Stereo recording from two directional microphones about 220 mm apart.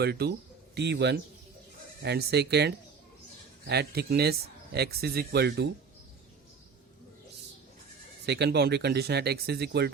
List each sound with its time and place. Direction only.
0.0 s speech: 50° right (ahead or behind)
8.3 s speech: 50° right (ahead or behind)